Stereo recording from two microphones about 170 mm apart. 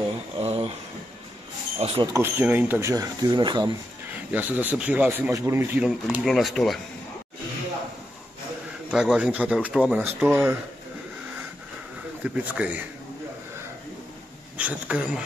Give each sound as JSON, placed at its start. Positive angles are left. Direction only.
{"t": 0.4, "sound": "a sound", "side_deg": -35}
{"t": 1.8, "sound": "speech", "side_deg": -35}
{"t": 2.1, "sound": "speech", "side_deg": -10}
{"t": 4.1, "sound": "speech", "side_deg": -10}
{"t": 5.9, "sound": "speech", "side_deg": 0}
{"t": 8.9, "sound": "speech", "side_deg": -5}
{"t": 12.2, "sound": "speech", "side_deg": -10}
{"t": 14.6, "sound": "speech", "side_deg": -5}